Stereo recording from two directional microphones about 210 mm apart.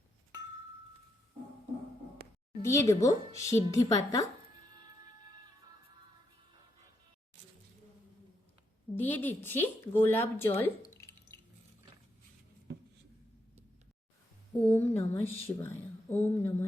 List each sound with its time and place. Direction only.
2.6 s a woman's voice: 15° left (ahead or behind)
9.0 s a woman's voice: 10° left (ahead or behind)
10.9 s drip: 15° left (ahead or behind)
14.7 s a woman's voice: 10° left (ahead or behind)